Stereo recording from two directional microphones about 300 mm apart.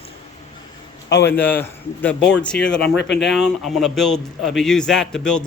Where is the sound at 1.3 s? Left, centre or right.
Centre.